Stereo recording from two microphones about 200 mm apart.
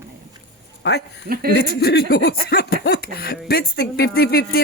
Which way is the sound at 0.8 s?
55° left (ahead or behind).